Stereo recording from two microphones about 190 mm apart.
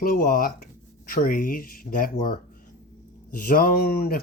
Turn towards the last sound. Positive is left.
turn(degrees=50)  # may be behind; listen again after turning